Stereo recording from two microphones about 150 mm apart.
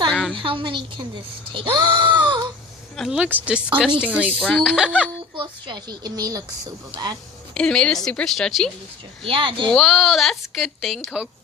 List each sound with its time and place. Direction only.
0.1 s a sound: 5° left (ahead or behind)
0.3 s speech: 35° right (ahead or behind)
2.9 s speech: centre (ahead or behind)
4.4 s speech: centre (ahead or behind)
5.3 s speech: 35° right (ahead or behind)
7.5 s speech: 5° left (ahead or behind)
9.2 s speech: 35° right (ahead or behind)
9.6 s speech: 5° left (ahead or behind)